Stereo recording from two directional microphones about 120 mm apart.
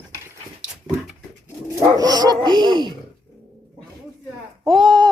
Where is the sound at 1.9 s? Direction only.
35° right (ahead or behind).